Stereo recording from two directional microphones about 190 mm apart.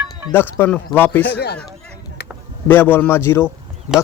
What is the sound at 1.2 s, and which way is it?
Speech, 60° left (ahead or behind).